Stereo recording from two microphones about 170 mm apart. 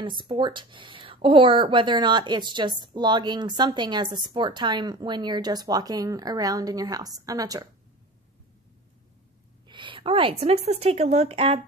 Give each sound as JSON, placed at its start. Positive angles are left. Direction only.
{"t": 0.0, "sound": "a woman's voice", "side_deg": -30}
{"t": 9.7, "sound": "a woman's voice", "side_deg": -30}